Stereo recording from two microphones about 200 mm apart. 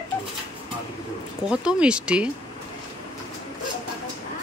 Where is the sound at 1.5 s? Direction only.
5° right (ahead or behind).